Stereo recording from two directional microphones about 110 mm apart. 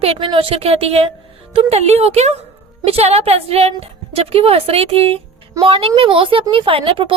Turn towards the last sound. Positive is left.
turn(degrees=-55)  # may be behind; listen again after turning